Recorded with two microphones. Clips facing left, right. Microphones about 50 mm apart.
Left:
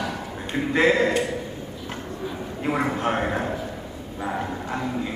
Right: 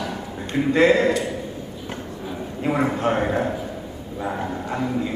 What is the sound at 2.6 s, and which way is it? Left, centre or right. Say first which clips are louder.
Speech: right 3 dB; centre.